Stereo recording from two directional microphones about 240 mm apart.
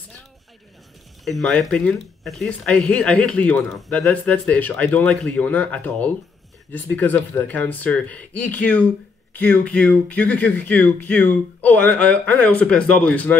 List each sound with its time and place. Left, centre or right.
1.2 s speech: centre